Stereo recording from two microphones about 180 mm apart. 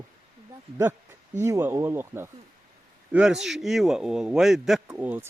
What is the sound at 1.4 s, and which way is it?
A man's voice, 15° right (ahead or behind).